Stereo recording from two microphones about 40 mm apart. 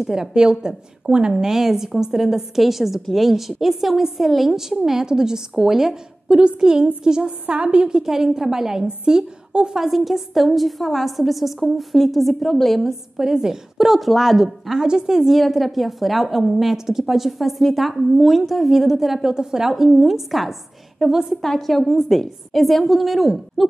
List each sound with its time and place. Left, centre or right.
0.0 s a woman's voice: centre
1.3 s a woman's voice: centre
6.2 s a woman's voice: right
7.4 s a woman's voice: right
8.0 s a woman's voice: centre
8.8 s a woman's voice: right
9.8 s a woman's voice: centre
13.2 s a woman's voice: centre
14.8 s a woman's voice: centre
15.3 s a woman's voice: centre
19.3 s a woman's voice: centre
21.4 s a woman's voice: centre